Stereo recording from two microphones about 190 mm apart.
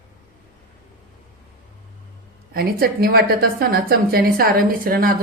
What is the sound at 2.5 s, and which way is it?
A woman's voice, 50° right (ahead or behind).